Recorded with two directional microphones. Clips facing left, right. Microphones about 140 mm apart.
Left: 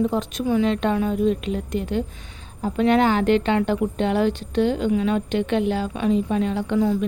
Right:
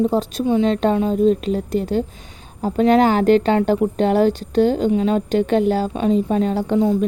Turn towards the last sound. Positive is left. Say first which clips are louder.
# right 4 dB
turn(degrees=-30)  # may be behind; listen again after turning